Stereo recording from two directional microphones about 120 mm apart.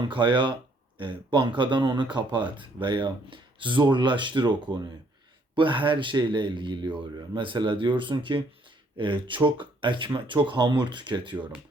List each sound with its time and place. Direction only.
0.0 s speech: 40° right (ahead or behind)